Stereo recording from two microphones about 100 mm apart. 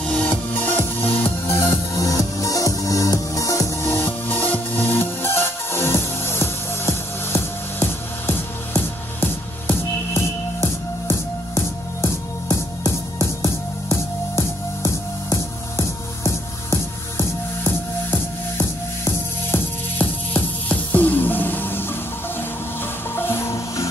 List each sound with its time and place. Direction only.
0.1 s music: 15° left (ahead or behind)
2.0 s music: 35° left (ahead or behind)
19.5 s music: 20° left (ahead or behind)
23.1 s music: 25° left (ahead or behind)